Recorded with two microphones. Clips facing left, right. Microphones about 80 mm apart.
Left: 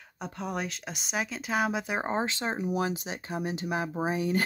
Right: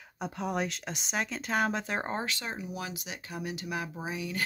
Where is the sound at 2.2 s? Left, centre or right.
Left.